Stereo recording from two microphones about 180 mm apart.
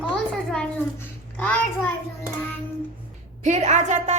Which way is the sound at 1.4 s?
10° left (ahead or behind).